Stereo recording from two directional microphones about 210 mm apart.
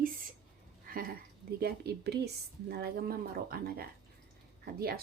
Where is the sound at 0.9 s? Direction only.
45° right (ahead or behind).